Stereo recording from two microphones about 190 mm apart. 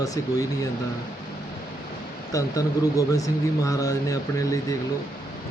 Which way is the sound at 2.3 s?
15° left (ahead or behind).